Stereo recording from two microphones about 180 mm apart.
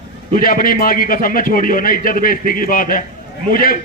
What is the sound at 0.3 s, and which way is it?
A man's voice, 50° left (ahead or behind).